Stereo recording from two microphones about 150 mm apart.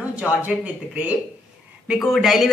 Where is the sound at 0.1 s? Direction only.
10° right (ahead or behind).